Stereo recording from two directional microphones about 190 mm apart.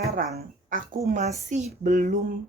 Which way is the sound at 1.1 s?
40° right (ahead or behind).